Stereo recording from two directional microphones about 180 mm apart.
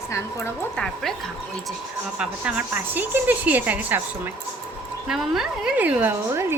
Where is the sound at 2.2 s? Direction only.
5° right (ahead or behind).